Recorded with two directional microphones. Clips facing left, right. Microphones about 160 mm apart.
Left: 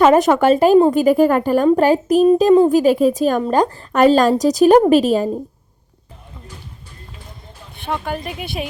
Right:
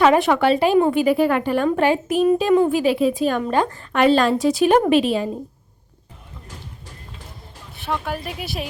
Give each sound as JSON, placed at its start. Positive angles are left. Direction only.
{"t": 0.0, "sound": "a woman's voice", "side_deg": 40}
{"t": 7.8, "sound": "speech", "side_deg": 0}